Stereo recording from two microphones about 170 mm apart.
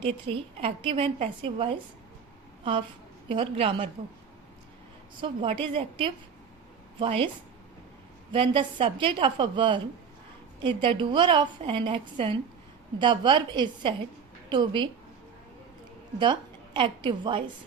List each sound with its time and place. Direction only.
0.0 s a woman's voice: 30° right (ahead or behind)
3.2 s a woman's voice: 30° right (ahead or behind)
5.2 s a woman's voice: 30° right (ahead or behind)
8.3 s a woman's voice: 30° right (ahead or behind)
16.1 s a woman's voice: 25° right (ahead or behind)